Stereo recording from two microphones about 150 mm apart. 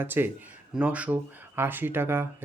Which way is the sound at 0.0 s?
15° right (ahead or behind).